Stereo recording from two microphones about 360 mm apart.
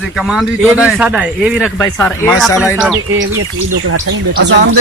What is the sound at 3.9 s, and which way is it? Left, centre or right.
Speech, right.